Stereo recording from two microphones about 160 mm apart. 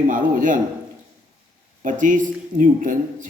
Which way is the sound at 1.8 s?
55° right (ahead or behind).